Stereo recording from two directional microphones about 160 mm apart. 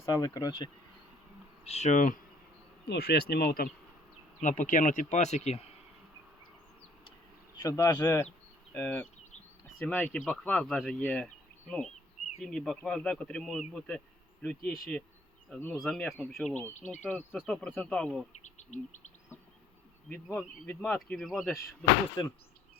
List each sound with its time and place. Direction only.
0.0 s speech: 20° left (ahead or behind)
1.6 s speech: 45° left (ahead or behind)
2.8 s speech: 90° left; by 3.7 s 70° left (ahead or behind)
4.4 s speech: 55° left (ahead or behind)
7.5 s speech: 20° left (ahead or behind); by 11.3 s 5° left (ahead or behind)
12.4 s speech: 5° left (ahead or behind)
16.6 s speech: 10° left (ahead or behind)
18.4 s insect: 45° left (ahead or behind)
20.1 s speech: 10° left (ahead or behind)